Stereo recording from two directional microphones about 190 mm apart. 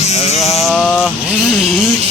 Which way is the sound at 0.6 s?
Centre (ahead or behind).